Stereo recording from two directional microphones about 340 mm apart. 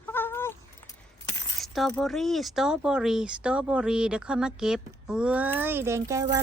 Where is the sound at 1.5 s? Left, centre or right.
Centre.